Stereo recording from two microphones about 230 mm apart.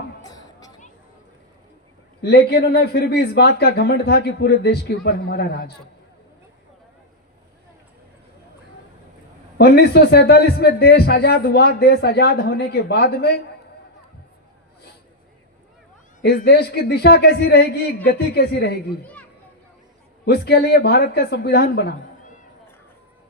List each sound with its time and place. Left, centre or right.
0.2 s a sound: centre
2.2 s a man's voice: left
9.6 s a man's voice: left
16.2 s a man's voice: left
20.2 s a man's voice: left